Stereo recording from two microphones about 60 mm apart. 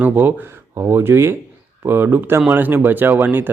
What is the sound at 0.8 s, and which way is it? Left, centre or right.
Speech, right.